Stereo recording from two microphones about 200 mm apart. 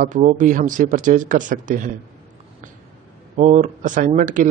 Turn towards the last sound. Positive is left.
turn(degrees=-40)  # may be behind; listen again after turning